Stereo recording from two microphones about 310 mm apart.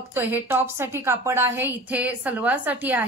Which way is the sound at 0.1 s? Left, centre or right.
Centre.